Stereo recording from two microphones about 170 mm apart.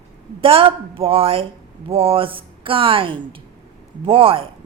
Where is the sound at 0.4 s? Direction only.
30° right (ahead or behind).